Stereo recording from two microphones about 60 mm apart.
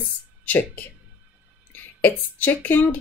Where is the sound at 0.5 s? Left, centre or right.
Left.